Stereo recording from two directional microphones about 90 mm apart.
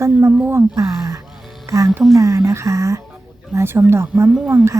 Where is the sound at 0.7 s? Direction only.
40° right (ahead or behind).